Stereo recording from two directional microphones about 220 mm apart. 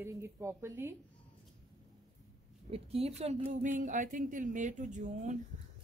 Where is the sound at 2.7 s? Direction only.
25° right (ahead or behind).